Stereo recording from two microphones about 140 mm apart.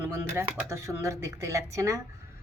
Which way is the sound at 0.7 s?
20° right (ahead or behind).